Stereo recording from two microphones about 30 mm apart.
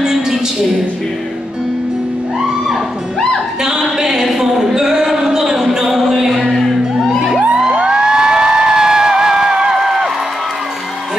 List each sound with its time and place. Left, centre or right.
0.0 s a sound: centre
4.0 s a sound: centre
6.5 s music: centre
7.3 s music: right
7.7 s music: right
9.8 s music: centre